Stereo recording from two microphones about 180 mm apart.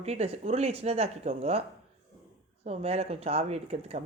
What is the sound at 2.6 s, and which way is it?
A woman's voice, 35° right (ahead or behind).